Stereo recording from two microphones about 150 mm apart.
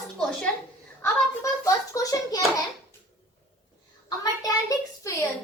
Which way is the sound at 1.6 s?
20° left (ahead or behind).